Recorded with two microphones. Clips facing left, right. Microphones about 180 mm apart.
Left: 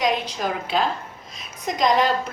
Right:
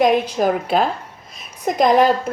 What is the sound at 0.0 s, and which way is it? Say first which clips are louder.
A woman's voice: right 8 dB; 55° right (ahead or behind).